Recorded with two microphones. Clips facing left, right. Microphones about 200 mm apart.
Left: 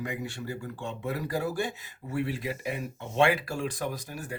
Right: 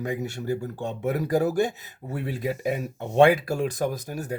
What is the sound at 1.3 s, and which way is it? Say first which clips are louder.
Speech: right 9 dB; 45° right (ahead or behind).